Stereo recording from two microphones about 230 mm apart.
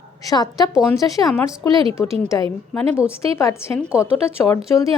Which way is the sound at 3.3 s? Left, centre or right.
Centre.